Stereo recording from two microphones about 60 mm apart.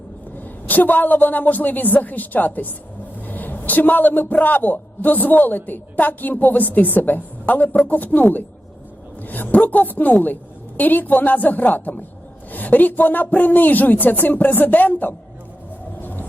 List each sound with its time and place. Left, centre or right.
0.3 s a man's voice: left
9.2 s a man's voice: left
16.0 s vehicle: left